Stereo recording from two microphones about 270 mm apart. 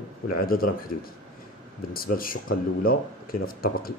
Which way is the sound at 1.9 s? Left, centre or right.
Left.